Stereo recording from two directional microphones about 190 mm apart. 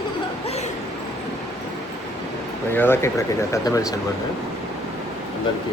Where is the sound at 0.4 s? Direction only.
35° left (ahead or behind).